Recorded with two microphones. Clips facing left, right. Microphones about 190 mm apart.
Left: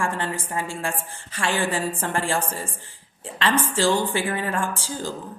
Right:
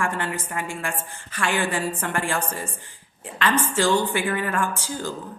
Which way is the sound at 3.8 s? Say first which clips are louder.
Right 1 dB; 30° left (ahead or behind).